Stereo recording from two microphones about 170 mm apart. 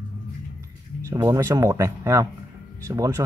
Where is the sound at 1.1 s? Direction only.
15° right (ahead or behind).